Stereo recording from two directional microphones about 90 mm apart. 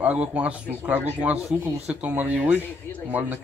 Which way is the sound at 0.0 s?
15° right (ahead or behind).